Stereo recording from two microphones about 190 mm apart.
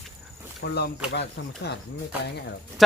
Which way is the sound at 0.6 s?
60° left (ahead or behind).